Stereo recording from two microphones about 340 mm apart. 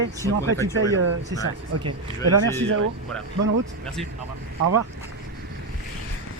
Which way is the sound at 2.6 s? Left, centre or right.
Right.